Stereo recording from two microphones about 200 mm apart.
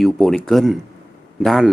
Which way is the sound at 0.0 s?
Centre (ahead or behind).